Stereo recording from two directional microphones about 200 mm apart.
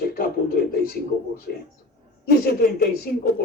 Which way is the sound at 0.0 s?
50° left (ahead or behind).